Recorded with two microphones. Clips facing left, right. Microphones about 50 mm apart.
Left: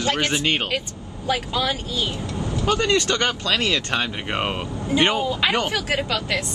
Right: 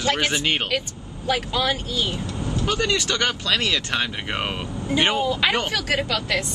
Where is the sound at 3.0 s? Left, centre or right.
Centre.